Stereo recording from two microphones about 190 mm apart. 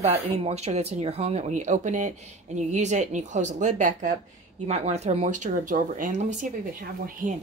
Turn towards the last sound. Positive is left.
turn(degrees=-45)  # may be behind; listen again after turning